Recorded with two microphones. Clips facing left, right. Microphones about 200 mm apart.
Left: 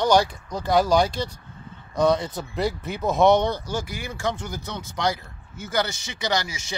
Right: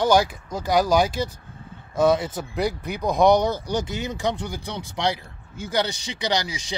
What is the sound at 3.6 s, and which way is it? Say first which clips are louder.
Speech: right 4 dB; 20° right (ahead or behind).